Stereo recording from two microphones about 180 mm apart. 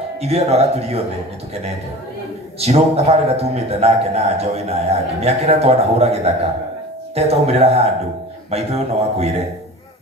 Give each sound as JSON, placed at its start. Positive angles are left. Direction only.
{"t": 0.2, "sound": "a man's voice", "side_deg": -35}
{"t": 2.6, "sound": "a man's voice", "side_deg": -35}